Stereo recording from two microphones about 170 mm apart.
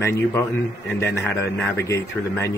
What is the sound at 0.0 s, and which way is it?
Speech, 15° left (ahead or behind).